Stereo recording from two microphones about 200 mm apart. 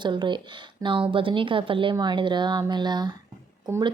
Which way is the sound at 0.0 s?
25° right (ahead or behind).